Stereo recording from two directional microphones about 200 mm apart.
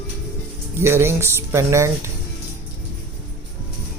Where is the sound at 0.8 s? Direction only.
10° right (ahead or behind).